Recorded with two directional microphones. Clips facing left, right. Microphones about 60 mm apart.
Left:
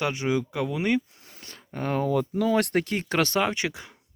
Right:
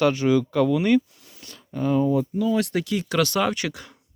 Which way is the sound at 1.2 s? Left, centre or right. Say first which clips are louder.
Right 1 dB; left.